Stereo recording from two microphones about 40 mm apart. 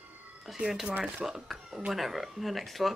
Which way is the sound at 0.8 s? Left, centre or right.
Right.